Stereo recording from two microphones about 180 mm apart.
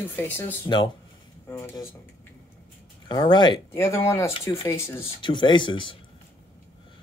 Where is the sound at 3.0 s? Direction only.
25° left (ahead or behind).